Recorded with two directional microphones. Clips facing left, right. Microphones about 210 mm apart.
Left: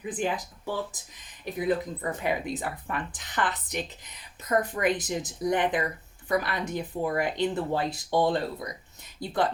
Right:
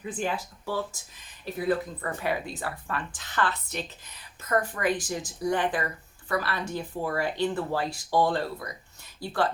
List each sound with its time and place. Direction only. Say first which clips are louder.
0.0 s speech: left 1 dB; 15° left (ahead or behind)